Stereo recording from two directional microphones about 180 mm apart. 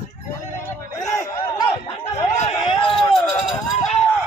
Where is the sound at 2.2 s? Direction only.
40° left (ahead or behind).